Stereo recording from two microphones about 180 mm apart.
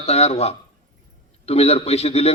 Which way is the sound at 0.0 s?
35° left (ahead or behind).